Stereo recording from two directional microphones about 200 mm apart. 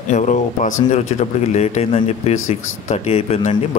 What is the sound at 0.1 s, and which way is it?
Speech, 40° left (ahead or behind).